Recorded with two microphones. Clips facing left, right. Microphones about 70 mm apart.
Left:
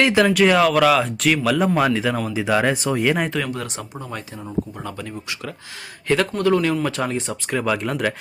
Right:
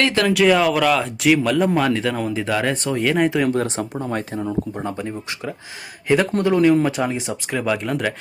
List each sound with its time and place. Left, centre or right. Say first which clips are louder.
0.0 s speech: left 2 dB; centre
0.3 s speech: even; centre
3.2 s speech: right 6 dB; centre
3.5 s speech: right 7 dB; right
4.8 s speech: right 4 dB; right; by 8.1 s centre